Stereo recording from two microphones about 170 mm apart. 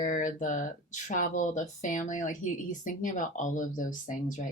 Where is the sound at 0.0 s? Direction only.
50° left (ahead or behind).